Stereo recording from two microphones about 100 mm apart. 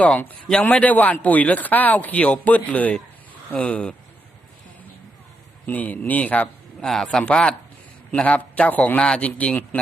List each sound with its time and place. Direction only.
0.0 s speech: 15° left (ahead or behind)
5.6 s speech: 15° left (ahead or behind)